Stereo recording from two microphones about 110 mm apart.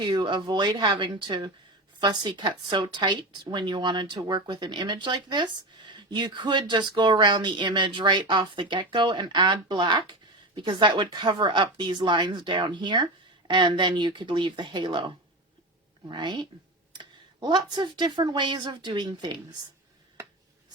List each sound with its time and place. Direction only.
0.0 s a woman's voice: 45° right (ahead or behind)